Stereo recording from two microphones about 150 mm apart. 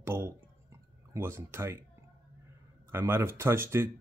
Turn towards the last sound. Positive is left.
turn(degrees=-15)  # may be behind; listen again after turning